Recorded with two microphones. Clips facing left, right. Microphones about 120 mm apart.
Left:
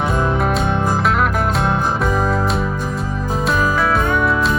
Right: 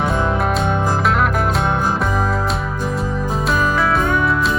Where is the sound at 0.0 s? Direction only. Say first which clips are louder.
Even; centre (ahead or behind).